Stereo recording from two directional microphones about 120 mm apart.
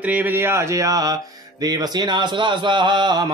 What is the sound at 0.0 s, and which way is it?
Speech, 15° right (ahead or behind).